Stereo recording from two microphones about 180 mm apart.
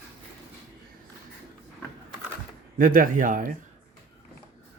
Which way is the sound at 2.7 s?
50° right (ahead or behind).